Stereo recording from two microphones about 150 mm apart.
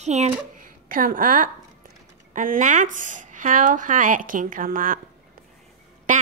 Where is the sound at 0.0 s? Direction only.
50° right (ahead or behind).